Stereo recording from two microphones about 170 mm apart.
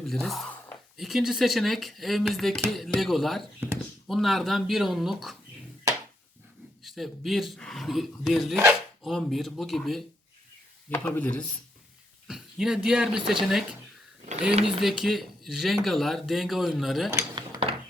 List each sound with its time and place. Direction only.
0.0 s speech: centre (ahead or behind)
6.8 s speech: centre (ahead or behind)
10.8 s speech: 10° left (ahead or behind)
12.3 s speech: 5° right (ahead or behind)
17.1 s a sound: 20° right (ahead or behind)